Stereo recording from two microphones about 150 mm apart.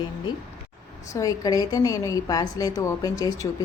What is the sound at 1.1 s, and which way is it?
A woman's voice, 25° left (ahead or behind).